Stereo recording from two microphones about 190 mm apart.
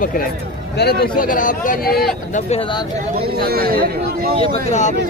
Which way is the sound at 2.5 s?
30° left (ahead or behind).